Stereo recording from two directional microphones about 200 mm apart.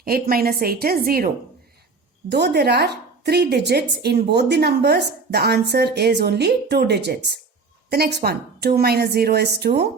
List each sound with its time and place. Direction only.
0.0 s a woman's voice: 50° right (ahead or behind)
2.3 s a woman's voice: 55° right (ahead or behind)